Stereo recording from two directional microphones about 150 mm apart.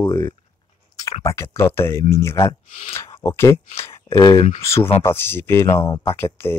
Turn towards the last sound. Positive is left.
turn(degrees=15)  # may be behind; listen again after turning